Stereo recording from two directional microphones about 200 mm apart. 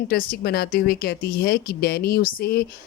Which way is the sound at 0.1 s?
50° left (ahead or behind).